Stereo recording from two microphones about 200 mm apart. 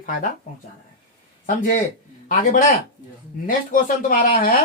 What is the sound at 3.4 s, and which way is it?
Speech, 40° left (ahead or behind).